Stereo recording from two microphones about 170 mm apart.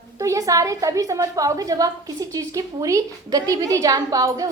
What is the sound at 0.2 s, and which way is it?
A woman's voice, 20° right (ahead or behind).